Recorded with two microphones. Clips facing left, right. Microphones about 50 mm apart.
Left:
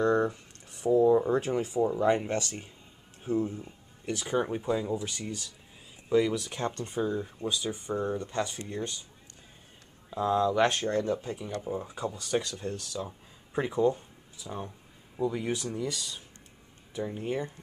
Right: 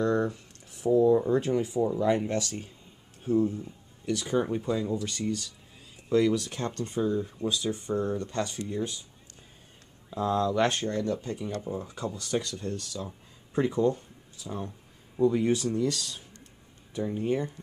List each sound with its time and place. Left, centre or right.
0.0 s a sound: centre
0.7 s a sound: centre
1.0 s speech: centre
2.3 s speech: left
3.2 s speech: centre
10.0 s speech: centre